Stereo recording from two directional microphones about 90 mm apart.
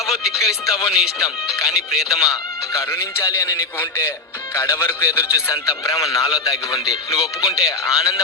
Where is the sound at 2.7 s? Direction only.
30° left (ahead or behind).